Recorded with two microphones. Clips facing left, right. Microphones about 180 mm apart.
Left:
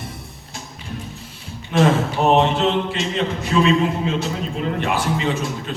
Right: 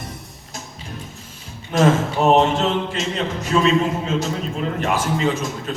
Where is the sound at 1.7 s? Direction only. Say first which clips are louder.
Even; 40° right (ahead or behind).